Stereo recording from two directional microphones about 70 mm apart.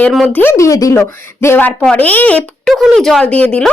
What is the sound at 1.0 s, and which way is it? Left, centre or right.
Speech, left.